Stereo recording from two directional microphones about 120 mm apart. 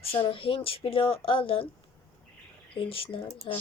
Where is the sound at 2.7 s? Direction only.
50° left (ahead or behind).